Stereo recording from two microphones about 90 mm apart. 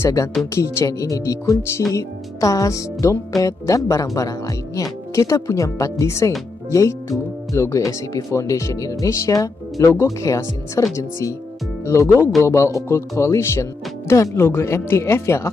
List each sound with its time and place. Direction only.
0.6 s speech: 35° left (ahead or behind)